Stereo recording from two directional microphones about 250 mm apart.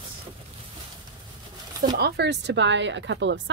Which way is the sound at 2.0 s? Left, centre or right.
Right.